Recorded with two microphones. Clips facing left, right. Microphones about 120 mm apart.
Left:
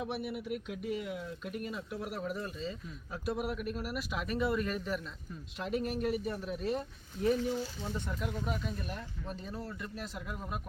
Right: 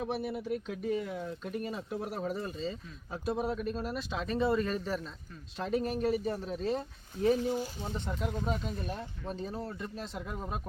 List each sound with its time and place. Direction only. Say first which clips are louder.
0.0 s speech: right 3 dB; 30° right (ahead or behind)
7.3 s speech: right 2 dB; 40° right (ahead or behind)
7.9 s speech: right 2 dB; 20° right (ahead or behind)